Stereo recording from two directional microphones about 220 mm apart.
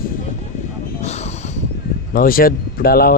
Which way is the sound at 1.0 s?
30° left (ahead or behind).